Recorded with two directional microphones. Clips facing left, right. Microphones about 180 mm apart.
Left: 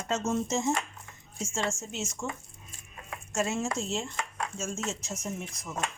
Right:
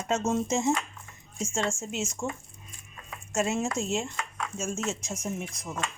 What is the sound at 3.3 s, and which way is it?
Speech, 20° right (ahead or behind).